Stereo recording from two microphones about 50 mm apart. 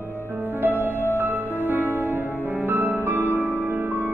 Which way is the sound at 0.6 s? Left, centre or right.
Right.